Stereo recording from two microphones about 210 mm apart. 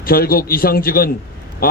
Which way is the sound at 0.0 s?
45° left (ahead or behind).